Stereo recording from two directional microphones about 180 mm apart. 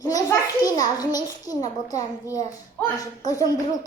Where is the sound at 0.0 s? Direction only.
20° left (ahead or behind).